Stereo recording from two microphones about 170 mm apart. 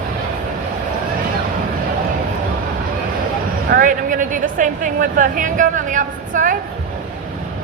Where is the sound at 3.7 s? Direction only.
50° right (ahead or behind).